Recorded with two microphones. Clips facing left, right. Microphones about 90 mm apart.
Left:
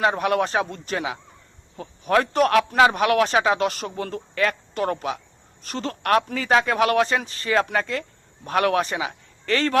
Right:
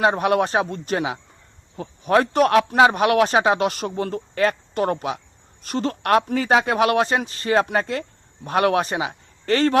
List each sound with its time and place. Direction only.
0.1 s speech: 30° right (ahead or behind)